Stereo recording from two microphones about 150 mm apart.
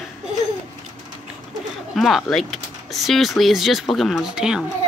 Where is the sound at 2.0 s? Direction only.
Centre (ahead or behind).